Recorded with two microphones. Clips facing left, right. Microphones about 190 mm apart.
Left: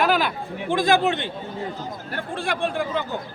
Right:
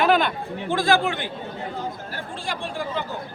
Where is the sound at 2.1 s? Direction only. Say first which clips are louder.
Left 4 dB; 60° left (ahead or behind).